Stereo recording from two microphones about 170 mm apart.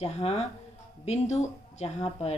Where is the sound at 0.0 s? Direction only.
35° left (ahead or behind).